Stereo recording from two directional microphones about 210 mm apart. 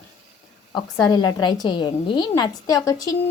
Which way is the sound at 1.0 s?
20° left (ahead or behind).